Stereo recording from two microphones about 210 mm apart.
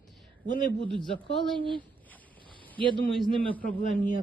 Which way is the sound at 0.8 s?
25° right (ahead or behind).